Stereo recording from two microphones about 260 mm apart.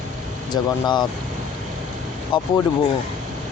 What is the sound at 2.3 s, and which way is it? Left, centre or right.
Speech, centre.